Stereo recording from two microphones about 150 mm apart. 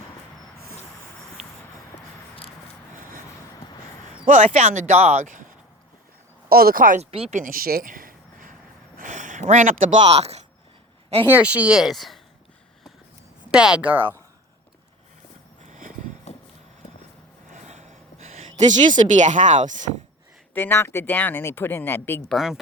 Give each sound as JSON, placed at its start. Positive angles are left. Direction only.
{"t": 3.0, "sound": "vehicle", "side_deg": -65}
{"t": 4.4, "sound": "speech", "side_deg": -50}
{"t": 6.5, "sound": "speech", "side_deg": -85}
{"t": 7.0, "sound": "speech", "side_deg": -45}
{"t": 7.3, "sound": "a sound", "side_deg": -70}
{"t": 10.0, "sound": "speech", "side_deg": -45}
{"t": 11.3, "sound": "speech", "side_deg": -10}
{"t": 13.5, "sound": "speech", "side_deg": -5}
{"t": 17.5, "sound": "a sound", "side_deg": -50}
{"t": 20.5, "sound": "speech", "side_deg": 15}
{"t": 22.3, "sound": "speech", "side_deg": 0}